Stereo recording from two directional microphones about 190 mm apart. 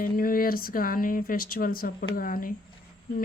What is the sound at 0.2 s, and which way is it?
Speech, 50° left (ahead or behind).